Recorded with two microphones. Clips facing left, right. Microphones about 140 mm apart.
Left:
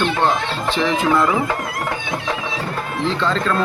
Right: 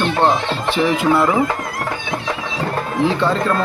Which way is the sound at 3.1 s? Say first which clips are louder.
Even; 15° right (ahead or behind).